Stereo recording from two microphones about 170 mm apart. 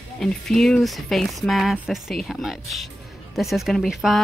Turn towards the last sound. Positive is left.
turn(degrees=0)  # may be behind; listen again after turning